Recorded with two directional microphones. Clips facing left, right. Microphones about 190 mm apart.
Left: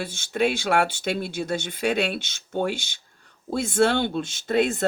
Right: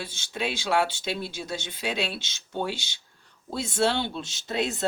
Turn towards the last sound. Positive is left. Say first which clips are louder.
# left 7 dB
turn(degrees=55)  # may be behind; listen again after turning